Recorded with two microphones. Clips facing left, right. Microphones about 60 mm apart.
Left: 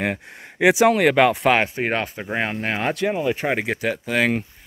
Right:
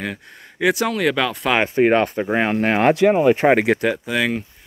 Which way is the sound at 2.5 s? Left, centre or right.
Right.